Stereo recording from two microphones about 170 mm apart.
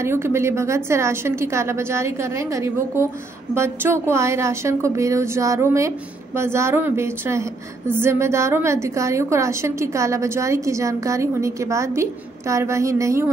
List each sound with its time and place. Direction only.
0.0 s a woman's voice: 15° right (ahead or behind)